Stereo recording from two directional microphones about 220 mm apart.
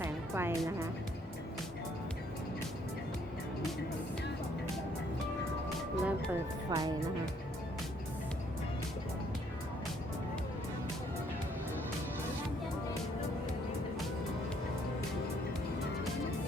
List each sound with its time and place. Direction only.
0.0 s music: 10° right (ahead or behind)
5.6 s music: centre (ahead or behind)
6.7 s speech: 15° right (ahead or behind)